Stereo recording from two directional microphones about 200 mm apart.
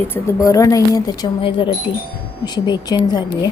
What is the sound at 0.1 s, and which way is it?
Speech, 15° left (ahead or behind).